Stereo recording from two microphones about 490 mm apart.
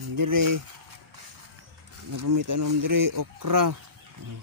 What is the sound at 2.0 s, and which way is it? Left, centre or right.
Speech, right.